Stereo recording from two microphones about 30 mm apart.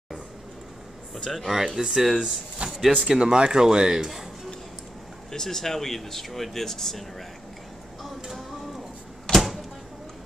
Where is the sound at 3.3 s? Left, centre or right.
Right.